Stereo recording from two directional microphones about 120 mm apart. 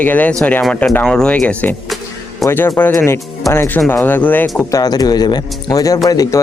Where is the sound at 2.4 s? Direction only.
20° left (ahead or behind).